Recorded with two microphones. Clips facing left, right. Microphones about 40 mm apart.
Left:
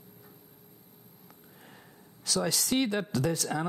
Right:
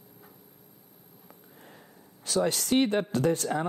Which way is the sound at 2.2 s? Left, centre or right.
Right.